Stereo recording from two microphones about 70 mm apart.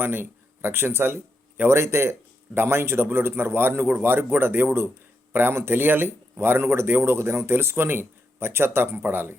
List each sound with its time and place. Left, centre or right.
0.0 s speech: right